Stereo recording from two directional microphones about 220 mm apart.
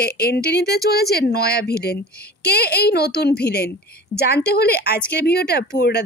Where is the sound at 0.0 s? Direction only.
45° left (ahead or behind).